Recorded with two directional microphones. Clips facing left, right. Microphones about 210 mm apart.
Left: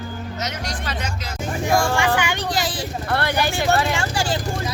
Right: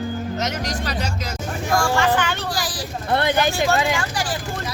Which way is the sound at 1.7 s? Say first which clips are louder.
Even; 20° left (ahead or behind).